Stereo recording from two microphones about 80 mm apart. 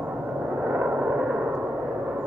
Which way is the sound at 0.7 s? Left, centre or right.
Right.